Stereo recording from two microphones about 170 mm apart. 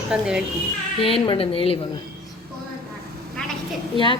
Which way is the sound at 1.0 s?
30° left (ahead or behind).